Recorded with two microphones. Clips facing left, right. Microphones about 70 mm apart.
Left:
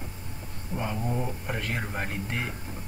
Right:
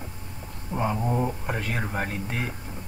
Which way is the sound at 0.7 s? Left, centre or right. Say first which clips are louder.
Right 5 dB; right.